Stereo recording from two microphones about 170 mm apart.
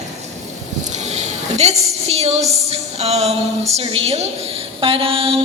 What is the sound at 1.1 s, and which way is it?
A woman's voice, 40° right (ahead or behind).